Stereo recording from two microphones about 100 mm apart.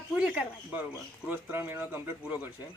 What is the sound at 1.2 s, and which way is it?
A woman's voice, 20° right (ahead or behind).